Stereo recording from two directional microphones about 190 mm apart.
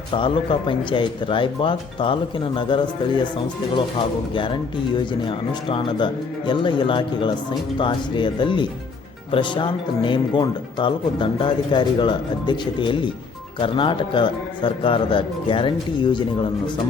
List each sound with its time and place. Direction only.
0.1 s speech: 25° left (ahead or behind)